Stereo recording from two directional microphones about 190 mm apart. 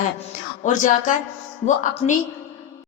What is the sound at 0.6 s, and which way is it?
A woman's voice, 40° left (ahead or behind).